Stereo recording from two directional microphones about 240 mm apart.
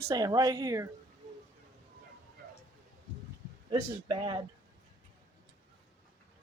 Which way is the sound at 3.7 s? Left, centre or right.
Centre.